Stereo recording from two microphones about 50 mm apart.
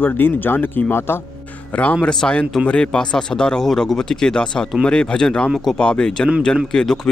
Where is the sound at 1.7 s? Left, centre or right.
Left.